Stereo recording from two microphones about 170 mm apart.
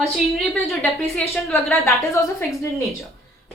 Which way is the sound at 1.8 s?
20° left (ahead or behind).